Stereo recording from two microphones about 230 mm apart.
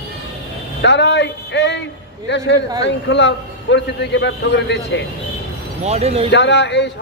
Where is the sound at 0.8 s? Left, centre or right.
Left.